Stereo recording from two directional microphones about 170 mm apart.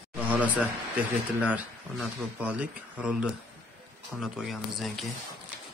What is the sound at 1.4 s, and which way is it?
Speech, 10° right (ahead or behind).